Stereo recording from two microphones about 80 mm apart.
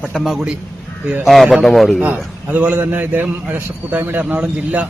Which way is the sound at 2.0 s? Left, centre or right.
Centre.